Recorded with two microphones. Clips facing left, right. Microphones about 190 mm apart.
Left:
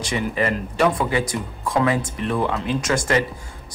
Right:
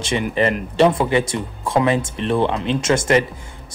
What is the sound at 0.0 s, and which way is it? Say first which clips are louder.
Speech: right 4 dB; 25° right (ahead or behind).